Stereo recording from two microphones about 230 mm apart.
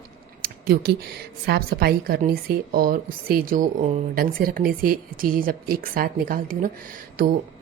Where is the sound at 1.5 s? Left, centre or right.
Right.